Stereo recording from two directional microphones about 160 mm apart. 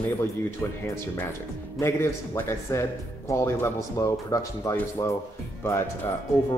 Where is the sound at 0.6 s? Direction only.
15° left (ahead or behind).